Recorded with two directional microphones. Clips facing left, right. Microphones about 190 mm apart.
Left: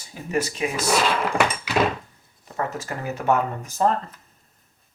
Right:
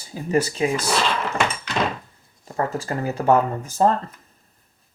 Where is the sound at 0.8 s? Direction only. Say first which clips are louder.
Left 1 dB; 10° left (ahead or behind).